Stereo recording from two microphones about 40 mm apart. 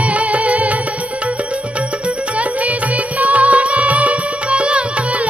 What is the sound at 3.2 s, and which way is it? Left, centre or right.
Music, right.